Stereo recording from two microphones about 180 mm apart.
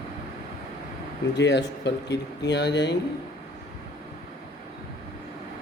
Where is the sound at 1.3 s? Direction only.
75° left (ahead or behind).